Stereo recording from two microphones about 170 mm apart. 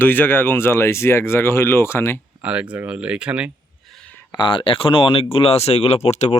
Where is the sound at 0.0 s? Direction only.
10° left (ahead or behind).